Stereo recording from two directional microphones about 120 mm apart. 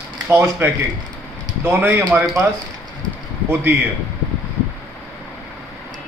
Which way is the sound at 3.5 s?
15° right (ahead or behind).